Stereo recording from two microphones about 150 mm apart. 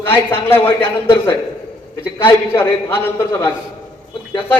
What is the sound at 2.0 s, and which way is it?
A man's voice, 15° left (ahead or behind).